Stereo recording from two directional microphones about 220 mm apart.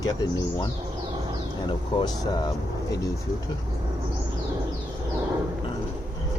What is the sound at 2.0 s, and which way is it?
Speech, 20° left (ahead or behind).